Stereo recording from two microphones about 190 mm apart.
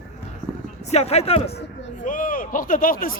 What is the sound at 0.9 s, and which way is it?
Speech, 35° left (ahead or behind).